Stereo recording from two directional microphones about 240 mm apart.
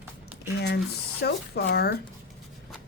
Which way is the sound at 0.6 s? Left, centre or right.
Left.